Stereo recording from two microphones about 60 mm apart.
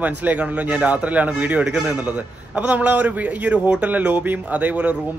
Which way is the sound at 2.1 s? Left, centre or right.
Right.